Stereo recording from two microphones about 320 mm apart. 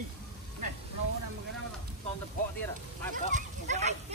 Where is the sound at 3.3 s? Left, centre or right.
Right.